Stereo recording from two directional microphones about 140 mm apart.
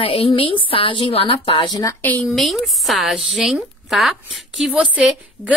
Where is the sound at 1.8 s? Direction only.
10° left (ahead or behind).